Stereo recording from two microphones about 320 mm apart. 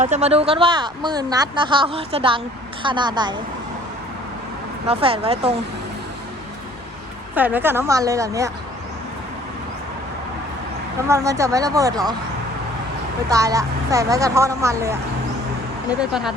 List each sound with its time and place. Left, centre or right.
0.0 s speech: right
4.9 s speech: centre
7.3 s speech: centre
11.1 s speech: centre
13.3 s speech: centre